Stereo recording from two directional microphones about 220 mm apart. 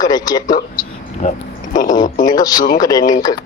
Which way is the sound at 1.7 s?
35° left (ahead or behind).